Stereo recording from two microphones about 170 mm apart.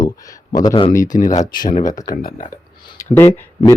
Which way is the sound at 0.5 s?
25° left (ahead or behind).